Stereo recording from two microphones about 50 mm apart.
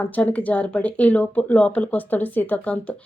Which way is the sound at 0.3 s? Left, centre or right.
Left.